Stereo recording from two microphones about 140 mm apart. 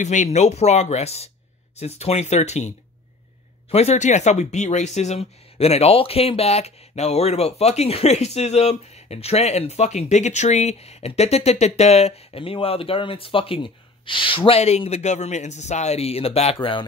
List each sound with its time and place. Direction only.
0.0 s speech: 60° left (ahead or behind)
3.7 s speech: 50° left (ahead or behind)